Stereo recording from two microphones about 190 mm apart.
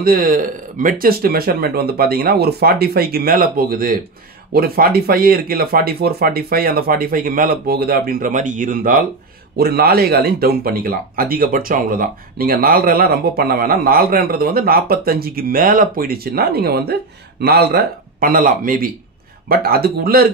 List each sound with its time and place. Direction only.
0.0 s speech: 50° right (ahead or behind)